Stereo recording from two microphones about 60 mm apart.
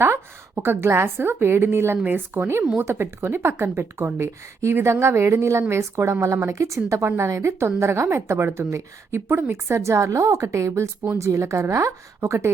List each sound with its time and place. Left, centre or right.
0.0 s a woman's voice: right